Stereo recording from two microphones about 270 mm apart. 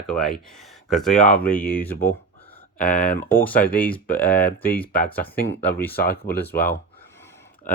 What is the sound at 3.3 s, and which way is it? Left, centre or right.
Speech, centre.